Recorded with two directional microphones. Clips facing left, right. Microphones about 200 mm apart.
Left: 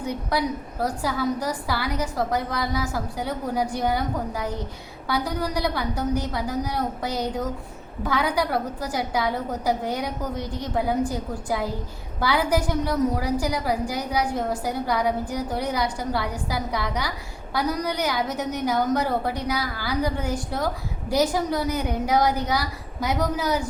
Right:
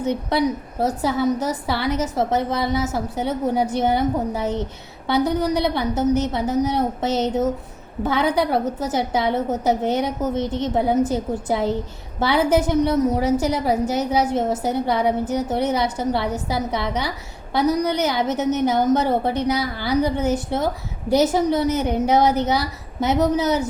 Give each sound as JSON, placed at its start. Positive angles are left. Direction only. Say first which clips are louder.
{"t": 0.0, "sound": "a woman's voice", "louder": "right 5 dB", "side_deg": -25}